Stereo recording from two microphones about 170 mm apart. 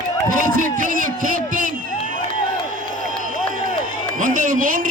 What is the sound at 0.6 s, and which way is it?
A man's voice, 50° right (ahead or behind).